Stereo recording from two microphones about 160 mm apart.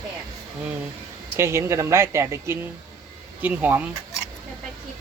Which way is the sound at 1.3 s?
15° right (ahead or behind).